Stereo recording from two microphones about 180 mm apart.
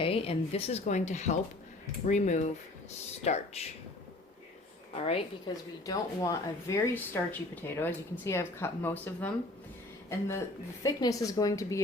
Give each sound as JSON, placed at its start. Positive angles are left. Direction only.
{"t": 0.0, "sound": "speech", "side_deg": 30}
{"t": 5.5, "sound": "a woman's voice", "side_deg": 25}